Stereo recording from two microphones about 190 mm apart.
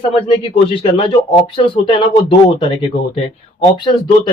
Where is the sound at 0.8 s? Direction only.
30° left (ahead or behind).